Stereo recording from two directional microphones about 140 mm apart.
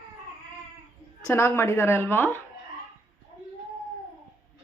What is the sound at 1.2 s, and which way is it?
Speech, 20° left (ahead or behind).